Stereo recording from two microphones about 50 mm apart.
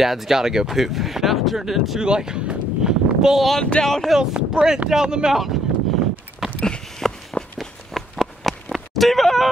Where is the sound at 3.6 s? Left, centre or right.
Centre.